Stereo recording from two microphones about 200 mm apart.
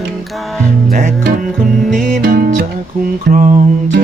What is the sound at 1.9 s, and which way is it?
Music, 45° right (ahead or behind).